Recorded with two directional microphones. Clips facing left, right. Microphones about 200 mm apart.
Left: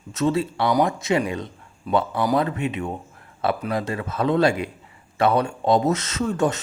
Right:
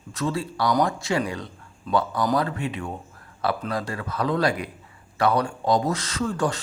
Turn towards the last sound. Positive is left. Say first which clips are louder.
# left 3 dB
turn(degrees=20)  # may be behind; listen again after turning